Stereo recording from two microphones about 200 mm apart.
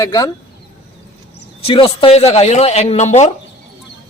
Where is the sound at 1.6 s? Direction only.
25° left (ahead or behind).